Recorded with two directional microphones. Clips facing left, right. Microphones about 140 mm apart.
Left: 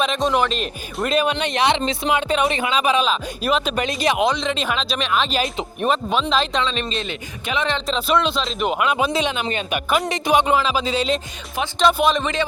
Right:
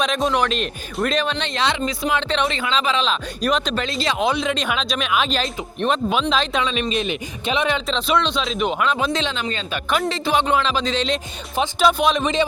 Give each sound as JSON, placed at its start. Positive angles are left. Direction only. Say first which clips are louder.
{"t": 0.0, "sound": "speech", "louder": "left 1 dB", "side_deg": 0}
{"t": 2.1, "sound": "speech", "louder": "left 4 dB", "side_deg": 10}
{"t": 3.8, "sound": "speech", "louder": "left 3 dB", "side_deg": 15}
{"t": 4.2, "sound": "speech", "louder": "even", "side_deg": -5}
{"t": 6.6, "sound": "speech", "louder": "right 2 dB", "side_deg": -10}
{"t": 7.9, "sound": "speech", "louder": "left 4 dB", "side_deg": 5}
{"t": 12.2, "sound": "speech", "louder": "right 3 dB", "side_deg": -15}